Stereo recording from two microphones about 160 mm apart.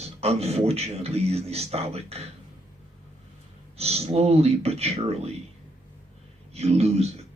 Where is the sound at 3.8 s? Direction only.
40° right (ahead or behind).